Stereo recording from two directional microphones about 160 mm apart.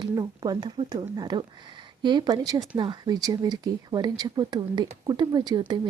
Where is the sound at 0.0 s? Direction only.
25° right (ahead or behind).